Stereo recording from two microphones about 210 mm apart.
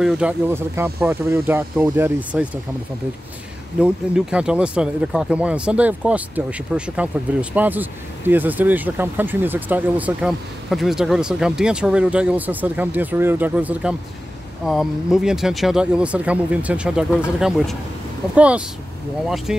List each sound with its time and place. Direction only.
0.0 s speech: 5° right (ahead or behind)
3.8 s speech: 5° right (ahead or behind)